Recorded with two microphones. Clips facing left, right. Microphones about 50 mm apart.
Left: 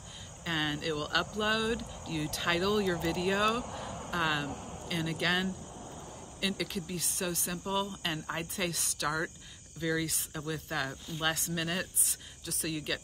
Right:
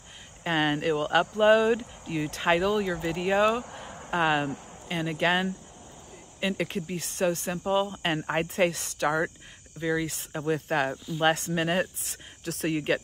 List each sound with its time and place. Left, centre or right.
0.4 s speech: right
4.1 s speech: right
8.1 s speech: right